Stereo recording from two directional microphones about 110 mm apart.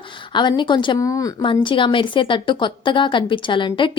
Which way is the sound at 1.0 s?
30° left (ahead or behind).